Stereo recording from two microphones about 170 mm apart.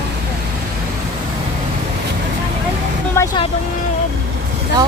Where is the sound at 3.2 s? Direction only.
15° left (ahead or behind).